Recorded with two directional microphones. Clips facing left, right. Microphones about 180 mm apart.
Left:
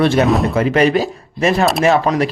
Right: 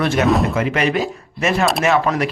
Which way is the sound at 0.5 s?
35° left (ahead or behind).